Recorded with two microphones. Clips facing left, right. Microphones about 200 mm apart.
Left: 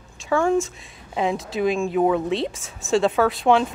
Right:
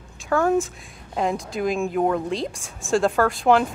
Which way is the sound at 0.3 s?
5° right (ahead or behind).